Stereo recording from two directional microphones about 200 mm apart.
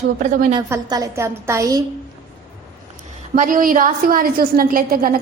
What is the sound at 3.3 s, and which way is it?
A woman's voice, 40° right (ahead or behind).